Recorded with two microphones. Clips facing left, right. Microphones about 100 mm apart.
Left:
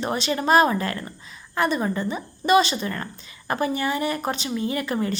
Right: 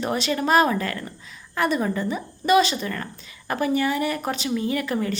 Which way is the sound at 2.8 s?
15° left (ahead or behind).